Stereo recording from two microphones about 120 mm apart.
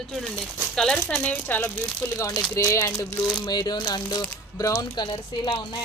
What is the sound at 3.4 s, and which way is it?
Speech, 35° left (ahead or behind).